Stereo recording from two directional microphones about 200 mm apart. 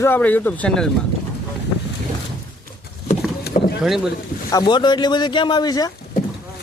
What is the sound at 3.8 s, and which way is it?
Speech, centre (ahead or behind).